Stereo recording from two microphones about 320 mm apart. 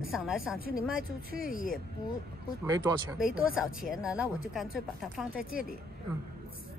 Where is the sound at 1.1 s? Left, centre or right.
Left.